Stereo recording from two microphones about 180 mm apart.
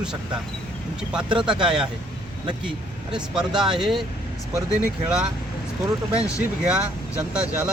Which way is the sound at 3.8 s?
Centre (ahead or behind).